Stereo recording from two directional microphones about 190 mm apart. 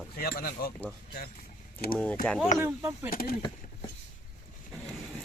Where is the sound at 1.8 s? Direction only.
55° left (ahead or behind).